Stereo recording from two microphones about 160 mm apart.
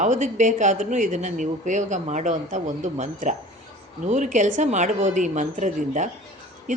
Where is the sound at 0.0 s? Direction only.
50° right (ahead or behind).